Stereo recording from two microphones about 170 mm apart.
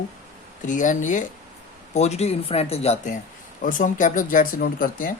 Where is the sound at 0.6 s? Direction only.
50° left (ahead or behind).